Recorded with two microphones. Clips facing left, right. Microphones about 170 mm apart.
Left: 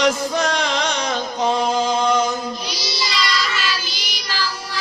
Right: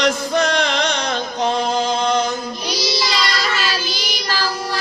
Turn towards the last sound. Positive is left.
turn(degrees=-45)  # may be behind; listen again after turning